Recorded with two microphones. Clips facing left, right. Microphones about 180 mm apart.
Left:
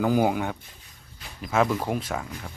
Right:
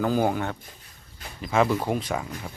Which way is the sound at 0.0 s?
15° left (ahead or behind).